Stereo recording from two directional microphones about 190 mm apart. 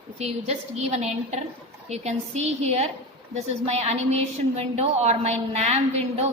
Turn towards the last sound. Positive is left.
turn(degrees=-35)  # may be behind; listen again after turning